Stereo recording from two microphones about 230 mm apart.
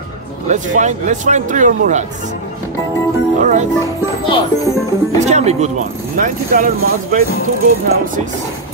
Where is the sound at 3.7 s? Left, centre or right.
Left.